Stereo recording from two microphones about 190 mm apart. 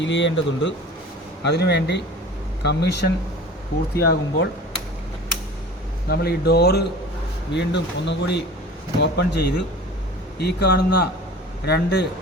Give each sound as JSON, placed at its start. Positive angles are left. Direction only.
{"t": 0.0, "sound": "speech", "side_deg": 70}
{"t": 6.1, "sound": "speech", "side_deg": 55}